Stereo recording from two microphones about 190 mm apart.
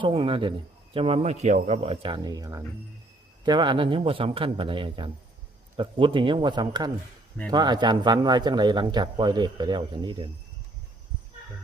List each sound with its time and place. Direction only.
0.0 s a man's voice: 30° right (ahead or behind)